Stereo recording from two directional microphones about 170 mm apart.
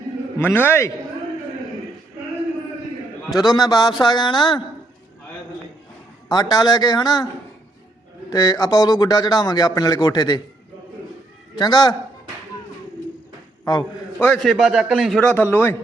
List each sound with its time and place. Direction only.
0.3 s a man's voice: 10° left (ahead or behind)
3.3 s a man's voice: 20° left (ahead or behind)
6.2 s a man's voice: 25° left (ahead or behind)
8.3 s a man's voice: 20° left (ahead or behind)
11.5 s a man's voice: 25° left (ahead or behind)
14.2 s a man's voice: 5° left (ahead or behind)